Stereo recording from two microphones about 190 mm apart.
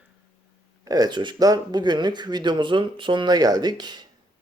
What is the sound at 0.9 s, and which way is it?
Speech, 20° right (ahead or behind).